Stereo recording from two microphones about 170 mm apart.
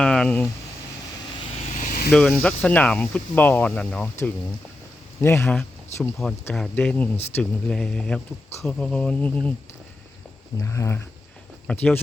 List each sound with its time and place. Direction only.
0.0 s a sound: 5° left (ahead or behind)
1.8 s vehicle: 60° left (ahead or behind)
2.1 s speech: 10° left (ahead or behind)
10.6 s speech: 15° left (ahead or behind)